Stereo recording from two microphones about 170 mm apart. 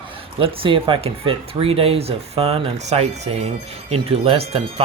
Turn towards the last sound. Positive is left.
turn(degrees=-35)  # may be behind; listen again after turning